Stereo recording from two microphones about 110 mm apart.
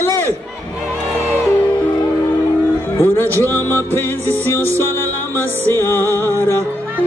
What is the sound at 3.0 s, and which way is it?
Music, 20° left (ahead or behind).